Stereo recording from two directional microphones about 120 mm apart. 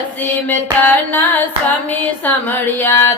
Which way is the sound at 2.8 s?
20° left (ahead or behind).